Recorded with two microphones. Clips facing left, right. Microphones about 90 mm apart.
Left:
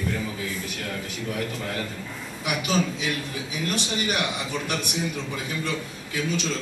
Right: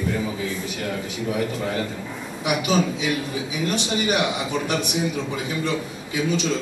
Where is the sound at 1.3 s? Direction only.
10° right (ahead or behind).